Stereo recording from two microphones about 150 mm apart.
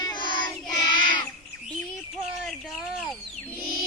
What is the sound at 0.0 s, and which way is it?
Child singing, 30° left (ahead or behind).